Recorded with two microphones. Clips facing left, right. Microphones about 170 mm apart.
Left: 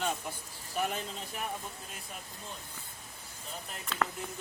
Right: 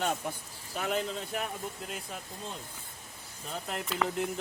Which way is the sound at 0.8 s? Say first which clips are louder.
Right 2 dB; 80° right.